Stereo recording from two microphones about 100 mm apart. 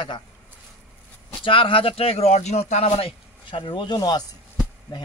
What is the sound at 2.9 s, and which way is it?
Speech, 55° left (ahead or behind).